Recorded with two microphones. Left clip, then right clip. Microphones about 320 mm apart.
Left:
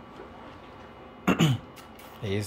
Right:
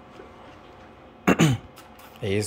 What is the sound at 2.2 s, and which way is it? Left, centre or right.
Speech, centre.